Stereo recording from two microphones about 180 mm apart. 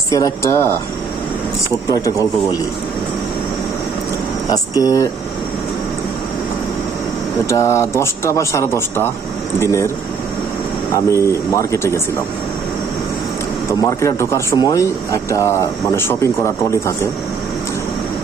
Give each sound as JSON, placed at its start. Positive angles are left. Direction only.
{"t": 0.1, "sound": "speech", "side_deg": 15}
{"t": 1.9, "sound": "speech", "side_deg": 20}
{"t": 4.8, "sound": "speech", "side_deg": 20}
{"t": 7.4, "sound": "speech", "side_deg": 15}
{"t": 10.9, "sound": "speech", "side_deg": 15}
{"t": 14.0, "sound": "speech", "side_deg": 15}